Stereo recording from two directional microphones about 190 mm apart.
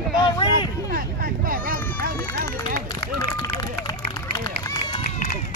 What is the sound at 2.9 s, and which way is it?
Run, 20° left (ahead or behind).